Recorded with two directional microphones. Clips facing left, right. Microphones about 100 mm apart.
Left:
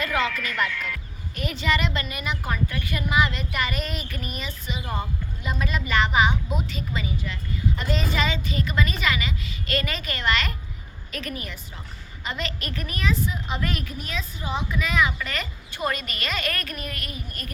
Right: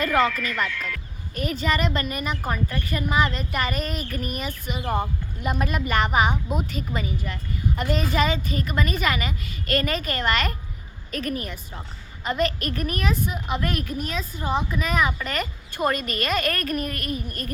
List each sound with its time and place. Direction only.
0.3 s speech: centre (ahead or behind)
1.4 s a woman's voice: 40° right (ahead or behind)